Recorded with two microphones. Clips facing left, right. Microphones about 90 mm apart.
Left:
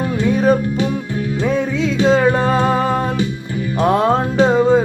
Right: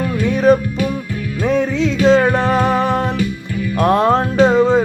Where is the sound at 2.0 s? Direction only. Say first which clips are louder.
Right 1 dB; 15° left (ahead or behind).